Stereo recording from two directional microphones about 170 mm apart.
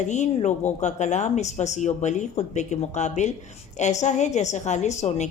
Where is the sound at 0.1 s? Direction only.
45° left (ahead or behind).